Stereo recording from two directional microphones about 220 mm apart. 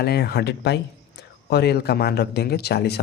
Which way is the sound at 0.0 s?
45° left (ahead or behind).